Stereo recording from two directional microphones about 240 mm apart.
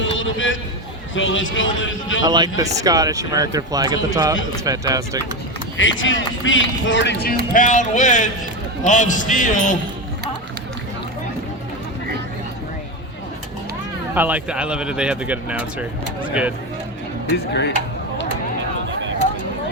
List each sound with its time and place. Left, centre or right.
0.2 s a man's voice: left
2.2 s speech: centre
5.7 s a man's voice: left
14.1 s speech: centre
17.3 s speech: left